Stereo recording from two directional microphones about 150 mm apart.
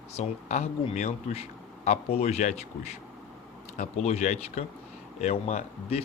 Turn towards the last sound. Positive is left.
turn(degrees=45)  # may be behind; listen again after turning